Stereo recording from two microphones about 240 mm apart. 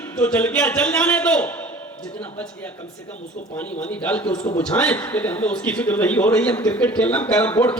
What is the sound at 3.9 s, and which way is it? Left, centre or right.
Speech, centre.